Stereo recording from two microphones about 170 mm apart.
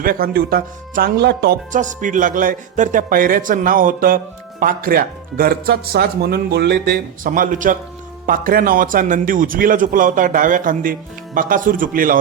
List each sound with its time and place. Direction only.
0.0 s speech: 60° right (ahead or behind)
1.7 s a man's voice: 50° right (ahead or behind); by 7.0 s 75° right (ahead or behind)
7.3 s a man's voice: 55° right (ahead or behind)